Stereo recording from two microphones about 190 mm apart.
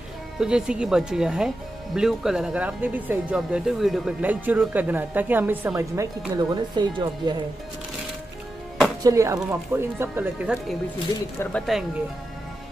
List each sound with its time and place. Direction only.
0.4 s speech: 5° right (ahead or behind); by 7.3 s 20° right (ahead or behind)
9.0 s speech: 20° right (ahead or behind)
11.3 s speech: 5° left (ahead or behind)